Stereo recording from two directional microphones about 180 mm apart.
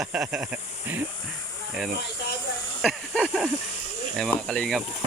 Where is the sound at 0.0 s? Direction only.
5° right (ahead or behind).